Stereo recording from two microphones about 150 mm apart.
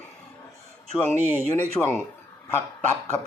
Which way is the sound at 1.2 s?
15° right (ahead or behind).